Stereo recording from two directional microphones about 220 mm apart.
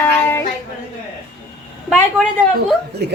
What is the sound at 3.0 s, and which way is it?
Speech, 50° right (ahead or behind).